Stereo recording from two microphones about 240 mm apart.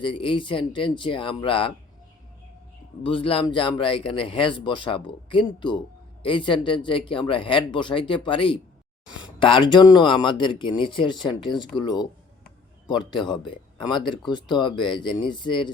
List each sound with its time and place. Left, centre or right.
0.0 s speech: left
3.0 s speech: left